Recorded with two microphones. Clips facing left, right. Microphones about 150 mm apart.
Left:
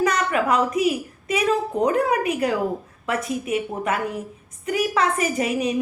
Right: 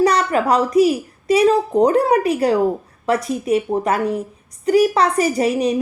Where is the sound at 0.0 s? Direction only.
35° right (ahead or behind).